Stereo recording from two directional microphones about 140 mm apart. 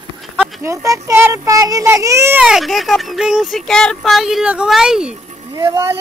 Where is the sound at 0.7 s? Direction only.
20° right (ahead or behind).